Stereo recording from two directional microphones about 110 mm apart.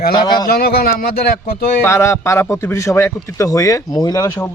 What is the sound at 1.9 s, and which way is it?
Speech, 25° left (ahead or behind).